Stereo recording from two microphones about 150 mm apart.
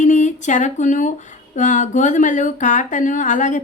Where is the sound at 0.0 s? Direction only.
55° left (ahead or behind).